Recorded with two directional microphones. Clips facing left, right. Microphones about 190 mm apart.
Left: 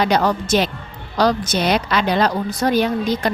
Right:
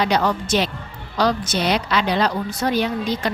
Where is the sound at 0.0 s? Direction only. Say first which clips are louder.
Left 2 dB; 40° left (ahead or behind).